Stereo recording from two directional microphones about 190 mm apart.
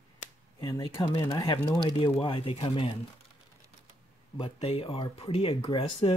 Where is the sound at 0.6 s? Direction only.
15° left (ahead or behind).